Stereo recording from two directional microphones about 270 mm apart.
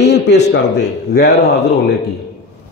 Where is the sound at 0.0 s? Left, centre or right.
Left.